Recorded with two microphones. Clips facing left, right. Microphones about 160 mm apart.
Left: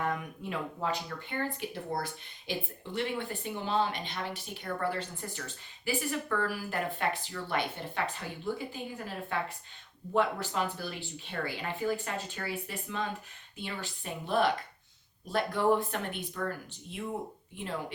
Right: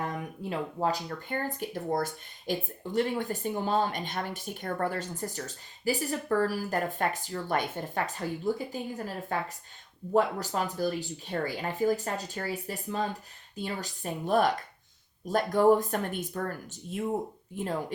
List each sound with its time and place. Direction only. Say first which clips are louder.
0.0 s speech: even; 35° right (ahead or behind)
17.5 s speech: right 5 dB; 40° right (ahead or behind)